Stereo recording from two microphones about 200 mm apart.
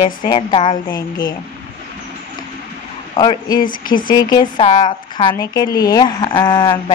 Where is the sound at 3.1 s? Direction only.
25° left (ahead or behind).